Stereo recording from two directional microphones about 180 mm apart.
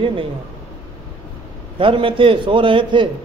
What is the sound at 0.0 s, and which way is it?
Speech, 30° right (ahead or behind).